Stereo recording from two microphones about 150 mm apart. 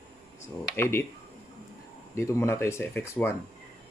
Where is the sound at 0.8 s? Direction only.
15° left (ahead or behind).